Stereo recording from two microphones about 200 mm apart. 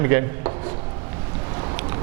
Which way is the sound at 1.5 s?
25° right (ahead or behind).